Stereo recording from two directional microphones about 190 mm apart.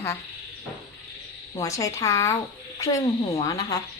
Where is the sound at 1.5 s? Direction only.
15° left (ahead or behind).